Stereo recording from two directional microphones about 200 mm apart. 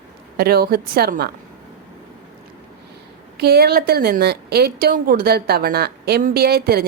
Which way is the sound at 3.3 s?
50° right (ahead or behind).